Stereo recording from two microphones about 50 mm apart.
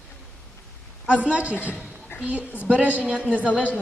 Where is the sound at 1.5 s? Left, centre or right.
Left.